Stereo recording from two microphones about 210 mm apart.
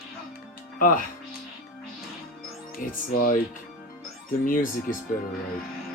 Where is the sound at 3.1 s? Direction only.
40° left (ahead or behind).